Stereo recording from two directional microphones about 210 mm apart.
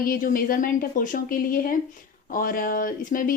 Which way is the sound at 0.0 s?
45° left (ahead or behind).